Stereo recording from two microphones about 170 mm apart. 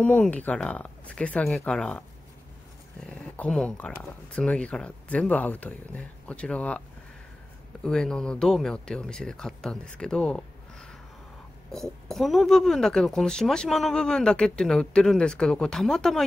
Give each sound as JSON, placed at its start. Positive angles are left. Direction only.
{"t": 0.0, "sound": "speech", "side_deg": 5}
{"t": 3.1, "sound": "speech", "side_deg": 5}
{"t": 7.8, "sound": "speech", "side_deg": 5}